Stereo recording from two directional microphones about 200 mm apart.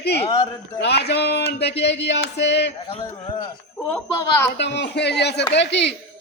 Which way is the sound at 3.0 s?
20° left (ahead or behind).